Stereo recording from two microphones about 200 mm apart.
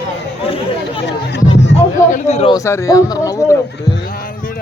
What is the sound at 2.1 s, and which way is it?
Speech, 35° left (ahead or behind).